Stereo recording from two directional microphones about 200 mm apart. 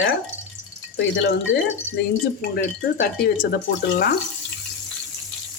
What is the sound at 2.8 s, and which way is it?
Speech, 45° left (ahead or behind).